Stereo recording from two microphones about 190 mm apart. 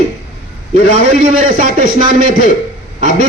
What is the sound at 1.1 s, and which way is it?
A woman's voice, 45° right (ahead or behind).